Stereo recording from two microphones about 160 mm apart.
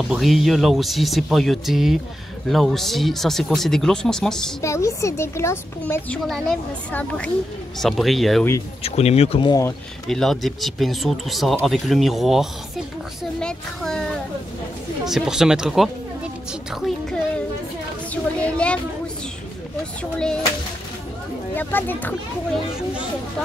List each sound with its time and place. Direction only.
0.1 s speech: centre (ahead or behind)
4.6 s a woman's voice: 20° left (ahead or behind)
6.2 s a woman's voice: 5° left (ahead or behind)
8.8 s speech: 40° left (ahead or behind)
9.5 s speech: 20° left (ahead or behind)
10.0 s speech: centre (ahead or behind)
18.1 s a woman's voice: 5° left (ahead or behind)
20.0 s speech: 5° left (ahead or behind)
21.5 s a woman's voice: 10° left (ahead or behind)